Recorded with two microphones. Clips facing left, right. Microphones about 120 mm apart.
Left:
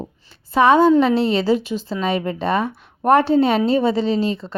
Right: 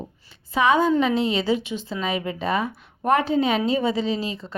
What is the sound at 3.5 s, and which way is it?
Speech, 35° left (ahead or behind).